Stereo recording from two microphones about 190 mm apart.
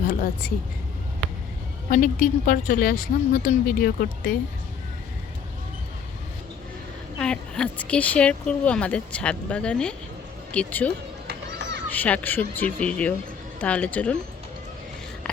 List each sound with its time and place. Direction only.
0.0 s speech: 45° left (ahead or behind)
1.9 s a woman's voice: 45° left (ahead or behind)
7.2 s speech: 5° left (ahead or behind)
11.3 s children playing: 60° right (ahead or behind)
11.9 s speech: 10° left (ahead or behind)